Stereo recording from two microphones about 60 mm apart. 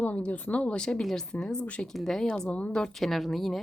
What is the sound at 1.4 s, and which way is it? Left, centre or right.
Speech, centre.